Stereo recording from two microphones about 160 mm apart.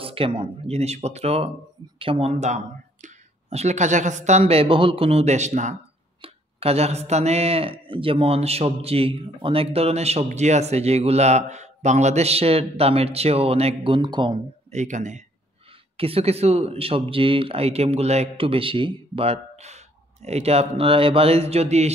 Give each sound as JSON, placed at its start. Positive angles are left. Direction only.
{"t": 0.0, "sound": "speech", "side_deg": -35}
{"t": 14.7, "sound": "speech", "side_deg": -45}
{"t": 16.0, "sound": "speech", "side_deg": -40}